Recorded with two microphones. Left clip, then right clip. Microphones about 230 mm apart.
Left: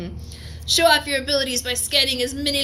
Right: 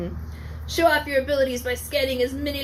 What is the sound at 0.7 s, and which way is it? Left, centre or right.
A woman's voice, left.